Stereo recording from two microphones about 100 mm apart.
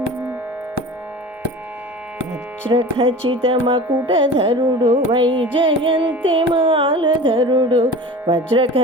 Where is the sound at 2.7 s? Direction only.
65° right (ahead or behind).